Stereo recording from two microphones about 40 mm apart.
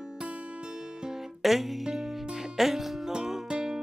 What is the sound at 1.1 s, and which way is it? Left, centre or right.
Music, centre.